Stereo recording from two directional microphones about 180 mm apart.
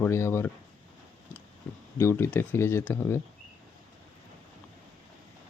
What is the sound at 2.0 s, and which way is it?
Speech, 10° left (ahead or behind).